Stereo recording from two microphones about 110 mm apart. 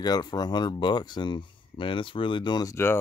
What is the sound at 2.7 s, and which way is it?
Speech, 20° left (ahead or behind).